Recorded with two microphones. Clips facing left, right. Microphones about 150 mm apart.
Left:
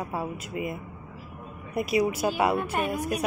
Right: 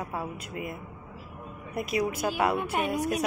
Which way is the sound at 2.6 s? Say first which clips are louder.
Left 1 dB; 10° right (ahead or behind).